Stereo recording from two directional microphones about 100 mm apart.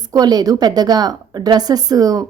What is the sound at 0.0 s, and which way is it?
A woman's voice, 40° right (ahead or behind).